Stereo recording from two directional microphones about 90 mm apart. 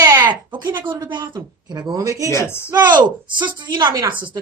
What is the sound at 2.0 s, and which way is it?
Speech, 40° right (ahead or behind).